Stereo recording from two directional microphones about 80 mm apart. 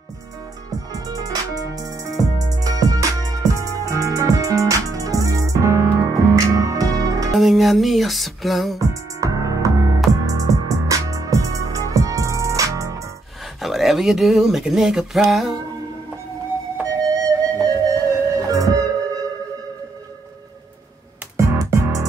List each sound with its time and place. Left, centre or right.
0.7 s music: right
7.3 s music: centre
8.7 s music: right
13.6 s speech: centre
16.8 s music: right
21.4 s music: right